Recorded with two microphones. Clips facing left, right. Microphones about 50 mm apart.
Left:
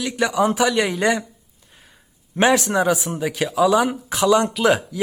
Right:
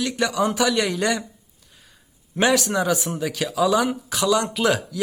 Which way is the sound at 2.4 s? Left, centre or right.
Left.